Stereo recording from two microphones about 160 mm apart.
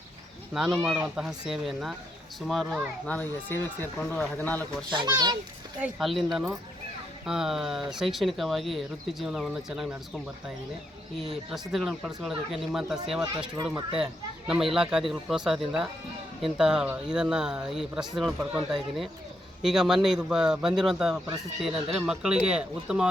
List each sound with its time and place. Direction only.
0.5 s speech: 5° right (ahead or behind)
3.2 s speech: 15° left (ahead or behind)
5.0 s a child's voice: 25° right (ahead or behind)
5.8 s speech: centre (ahead or behind)
11.2 s speech: centre (ahead or behind)